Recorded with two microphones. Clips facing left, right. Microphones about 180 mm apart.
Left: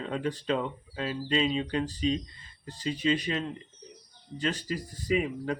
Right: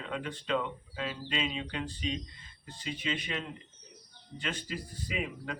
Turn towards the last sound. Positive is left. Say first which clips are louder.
# left 9 dB
turn(degrees=40)  # may be behind; listen again after turning